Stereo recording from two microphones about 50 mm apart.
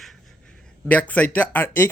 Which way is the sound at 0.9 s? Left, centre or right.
Left.